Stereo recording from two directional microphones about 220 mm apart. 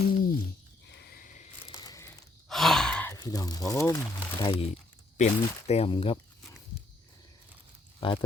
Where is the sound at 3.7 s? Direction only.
15° left (ahead or behind).